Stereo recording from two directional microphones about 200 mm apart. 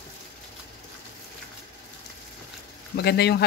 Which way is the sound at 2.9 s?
55° left (ahead or behind).